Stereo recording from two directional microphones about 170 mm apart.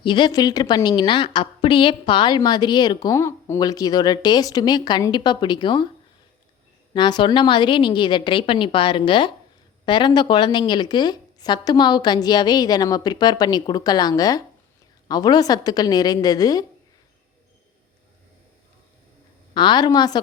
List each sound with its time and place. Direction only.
0.0 s a woman's voice: 30° left (ahead or behind)
6.9 s a woman's voice: 25° left (ahead or behind)
19.5 s a woman's voice: 25° left (ahead or behind)